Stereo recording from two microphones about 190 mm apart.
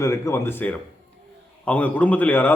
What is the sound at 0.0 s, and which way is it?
A man's voice, 15° left (ahead or behind).